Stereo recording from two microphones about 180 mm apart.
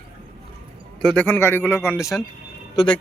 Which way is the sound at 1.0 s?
10° left (ahead or behind).